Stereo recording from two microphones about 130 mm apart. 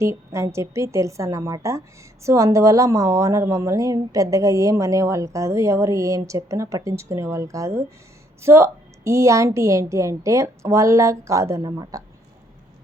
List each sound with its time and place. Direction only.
0.0 s a woman's voice: 20° right (ahead or behind)